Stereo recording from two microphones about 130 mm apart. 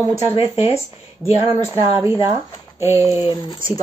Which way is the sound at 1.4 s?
35° right (ahead or behind).